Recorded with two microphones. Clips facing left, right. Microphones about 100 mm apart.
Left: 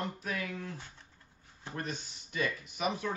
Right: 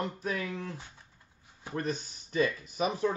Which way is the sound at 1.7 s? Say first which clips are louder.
Right 6 dB; 35° right (ahead or behind).